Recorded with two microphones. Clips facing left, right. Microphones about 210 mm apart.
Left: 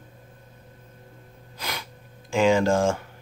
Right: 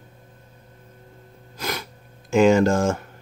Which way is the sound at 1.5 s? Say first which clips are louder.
Right 5 dB; 45° right (ahead or behind).